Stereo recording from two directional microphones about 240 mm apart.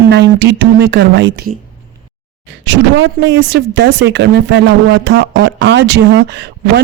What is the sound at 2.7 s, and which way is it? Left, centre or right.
Speech, right.